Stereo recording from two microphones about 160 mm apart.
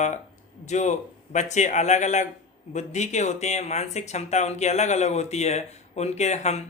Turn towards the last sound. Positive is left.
turn(degrees=45)  # may be behind; listen again after turning